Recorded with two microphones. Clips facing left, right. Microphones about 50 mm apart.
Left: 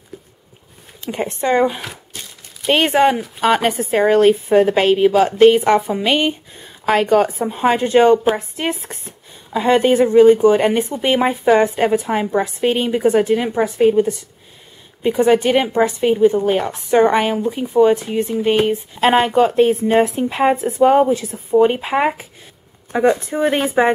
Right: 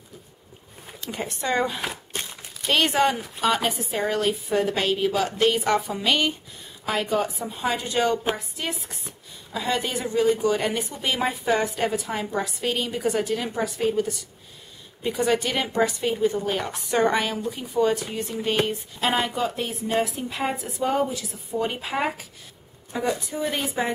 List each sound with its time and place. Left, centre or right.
1.0 s speech: left
2.1 s a sound: right
2.7 s speech: left
6.9 s speech: left
18.9 s speech: left